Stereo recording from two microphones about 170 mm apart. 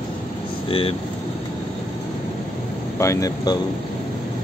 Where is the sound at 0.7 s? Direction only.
35° left (ahead or behind).